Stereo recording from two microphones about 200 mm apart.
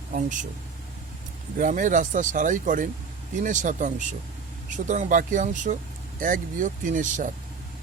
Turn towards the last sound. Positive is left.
turn(degrees=-40)  # may be behind; listen again after turning